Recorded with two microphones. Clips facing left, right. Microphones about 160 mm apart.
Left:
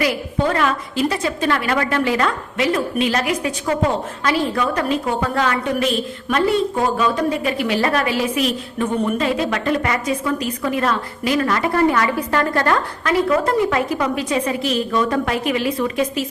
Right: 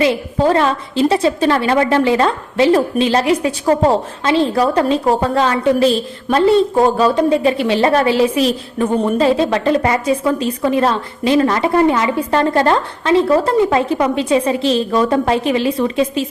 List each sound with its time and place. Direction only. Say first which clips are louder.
0.0 s a woman's voice: right 5 dB; 25° right (ahead or behind)